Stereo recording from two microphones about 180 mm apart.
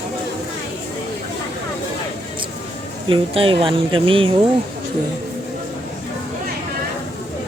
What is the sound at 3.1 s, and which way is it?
Speech, 30° right (ahead or behind).